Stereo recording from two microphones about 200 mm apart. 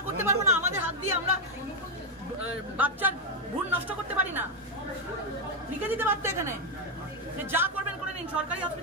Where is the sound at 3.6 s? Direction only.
10° right (ahead or behind).